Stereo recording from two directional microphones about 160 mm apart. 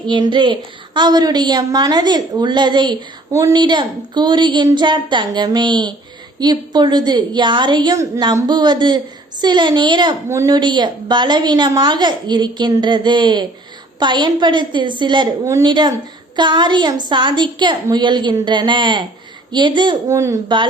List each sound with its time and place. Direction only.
0.1 s a woman's voice: 30° right (ahead or behind)